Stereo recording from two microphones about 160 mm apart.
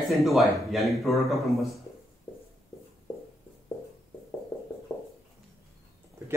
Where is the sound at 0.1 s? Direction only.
Centre (ahead or behind).